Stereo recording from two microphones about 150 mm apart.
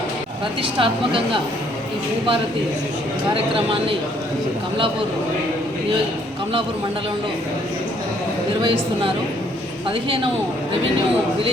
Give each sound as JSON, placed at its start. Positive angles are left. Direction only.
{"t": 0.6, "sound": "speech", "side_deg": -35}
{"t": 3.3, "sound": "speech", "side_deg": -35}